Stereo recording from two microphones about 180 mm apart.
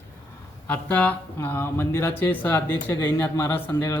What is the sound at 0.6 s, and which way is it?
A man's voice, 10° left (ahead or behind).